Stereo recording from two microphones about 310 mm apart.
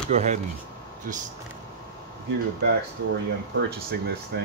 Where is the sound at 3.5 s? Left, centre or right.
Right.